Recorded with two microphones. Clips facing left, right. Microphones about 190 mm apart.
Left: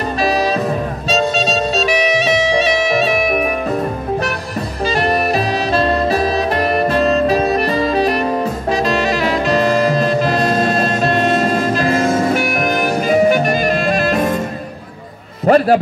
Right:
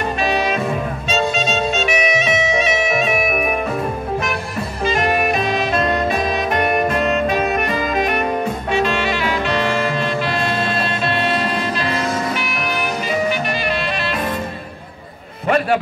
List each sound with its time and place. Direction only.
0.2 s music: 35° left (ahead or behind)
4.8 s music: 35° left (ahead or behind)
8.7 s saxophone: 40° left (ahead or behind)
15.4 s a sound: 35° left (ahead or behind)